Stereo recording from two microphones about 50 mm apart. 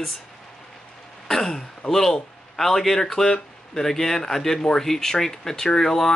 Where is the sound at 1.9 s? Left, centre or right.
Centre.